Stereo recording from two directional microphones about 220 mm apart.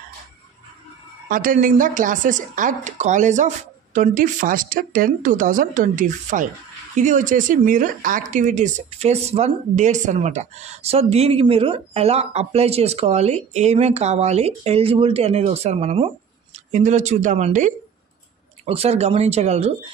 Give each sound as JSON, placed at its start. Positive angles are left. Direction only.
{"t": 1.3, "sound": "speech", "side_deg": -40}